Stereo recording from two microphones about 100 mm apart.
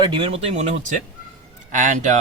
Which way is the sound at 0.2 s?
90° right.